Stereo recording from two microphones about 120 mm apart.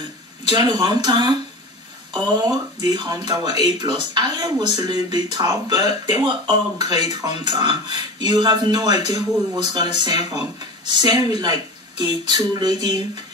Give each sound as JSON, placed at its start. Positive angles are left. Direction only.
{"t": 0.5, "sound": "speech", "side_deg": -35}